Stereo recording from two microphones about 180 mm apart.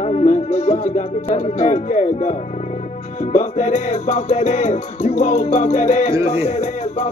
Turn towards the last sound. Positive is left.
turn(degrees=35)  # may be behind; listen again after turning